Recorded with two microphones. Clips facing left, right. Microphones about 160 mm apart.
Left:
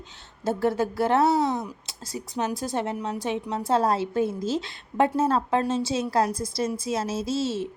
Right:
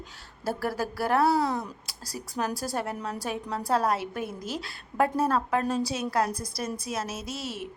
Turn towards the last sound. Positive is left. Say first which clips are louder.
# left 9 dB
turn(degrees=25)  # may be behind; listen again after turning